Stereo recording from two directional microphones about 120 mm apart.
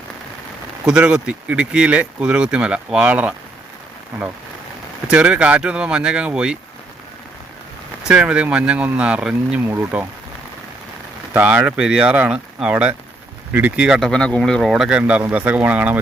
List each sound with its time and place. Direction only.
0.9 s speech: 10° right (ahead or behind)
5.0 s speech: 10° right (ahead or behind)
8.0 s speech: 5° right (ahead or behind)
11.3 s speech: 15° right (ahead or behind)
14.1 s speech: 5° left (ahead or behind); by 16.0 s 10° right (ahead or behind)